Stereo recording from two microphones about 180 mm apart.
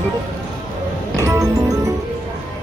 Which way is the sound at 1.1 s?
15° right (ahead or behind).